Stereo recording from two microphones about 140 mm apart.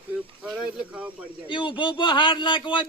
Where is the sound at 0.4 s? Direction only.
5° right (ahead or behind).